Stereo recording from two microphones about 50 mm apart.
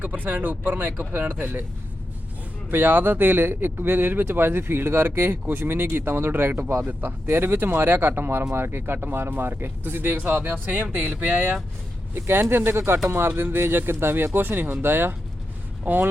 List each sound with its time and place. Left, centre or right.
0.0 s speech: right
2.6 s speech: right
11.3 s speech: right
12.1 s speech: right
15.8 s speech: right